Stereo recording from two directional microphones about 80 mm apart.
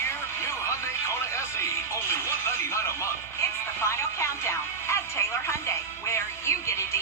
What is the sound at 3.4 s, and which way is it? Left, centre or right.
Music, left.